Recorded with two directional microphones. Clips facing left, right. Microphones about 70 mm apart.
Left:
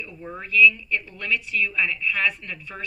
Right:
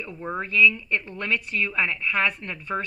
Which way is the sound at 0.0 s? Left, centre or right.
Right.